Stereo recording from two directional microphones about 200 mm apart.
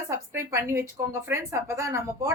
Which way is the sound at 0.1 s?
15° right (ahead or behind).